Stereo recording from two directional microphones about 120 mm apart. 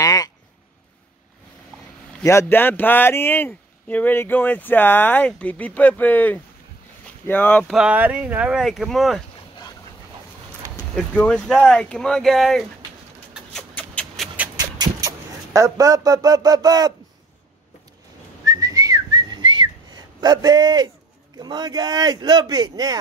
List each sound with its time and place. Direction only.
0.0 s a sound: 30° left (ahead or behind)
2.2 s speech: 20° left (ahead or behind)
7.6 s speech: 5° right (ahead or behind)
11.0 s speech: 5° left (ahead or behind)
14.2 s dog: centre (ahead or behind)
14.6 s a sound: 30° right (ahead or behind)
18.4 s whistling: 30° right (ahead or behind)
21.4 s speech: 35° right (ahead or behind)